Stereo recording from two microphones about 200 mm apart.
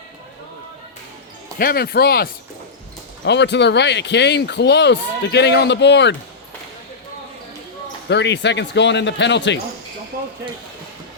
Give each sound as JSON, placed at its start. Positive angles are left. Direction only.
{"t": 1.5, "sound": "speech", "side_deg": 50}
{"t": 8.1, "sound": "speech", "side_deg": 60}